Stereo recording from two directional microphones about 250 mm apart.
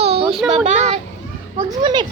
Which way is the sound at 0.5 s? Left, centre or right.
Right.